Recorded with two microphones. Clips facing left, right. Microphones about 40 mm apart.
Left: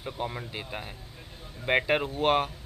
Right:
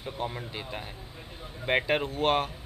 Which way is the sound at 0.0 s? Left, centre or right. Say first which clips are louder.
Even; centre.